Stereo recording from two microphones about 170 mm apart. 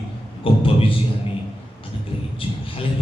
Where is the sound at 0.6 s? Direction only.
30° left (ahead or behind).